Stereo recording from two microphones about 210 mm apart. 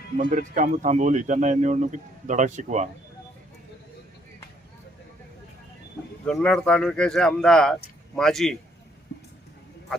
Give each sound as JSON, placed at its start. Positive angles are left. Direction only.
{"t": 0.2, "sound": "speech", "side_deg": -40}
{"t": 6.2, "sound": "speech", "side_deg": 5}